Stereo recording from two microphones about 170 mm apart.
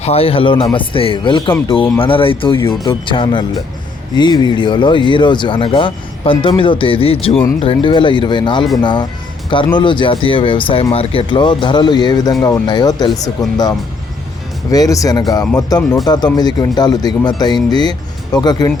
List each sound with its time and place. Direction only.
0.0 s speech: 35° left (ahead or behind)
14.7 s speech: 20° left (ahead or behind)